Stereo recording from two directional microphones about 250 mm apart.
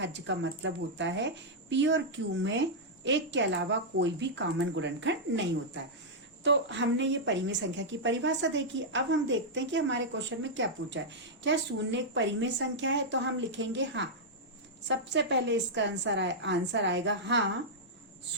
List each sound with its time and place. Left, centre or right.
0.0 s a woman's voice: right
6.4 s a woman's voice: right